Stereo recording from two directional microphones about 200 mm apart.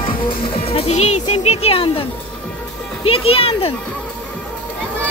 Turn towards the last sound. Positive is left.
turn(degrees=30)  # may be behind; listen again after turning